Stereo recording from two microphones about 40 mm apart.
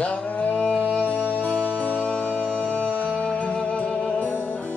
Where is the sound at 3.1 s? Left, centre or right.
Left.